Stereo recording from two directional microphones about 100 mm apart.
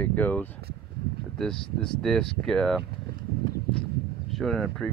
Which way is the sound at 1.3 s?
5° left (ahead or behind).